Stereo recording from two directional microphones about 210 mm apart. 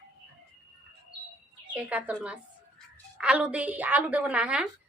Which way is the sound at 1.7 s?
5° right (ahead or behind).